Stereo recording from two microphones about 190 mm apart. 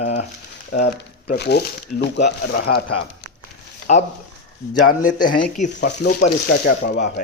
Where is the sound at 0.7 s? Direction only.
60° left (ahead or behind).